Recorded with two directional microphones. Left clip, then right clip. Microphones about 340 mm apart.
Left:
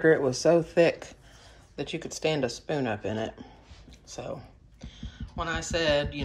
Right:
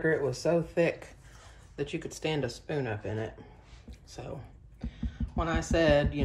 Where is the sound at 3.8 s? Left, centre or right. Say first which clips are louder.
Left 6 dB; centre.